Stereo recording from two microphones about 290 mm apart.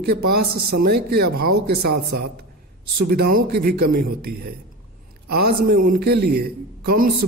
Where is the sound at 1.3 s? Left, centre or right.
Right.